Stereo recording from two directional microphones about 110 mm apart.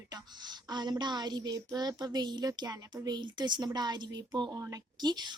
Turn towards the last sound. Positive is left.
turn(degrees=-40)  # may be behind; listen again after turning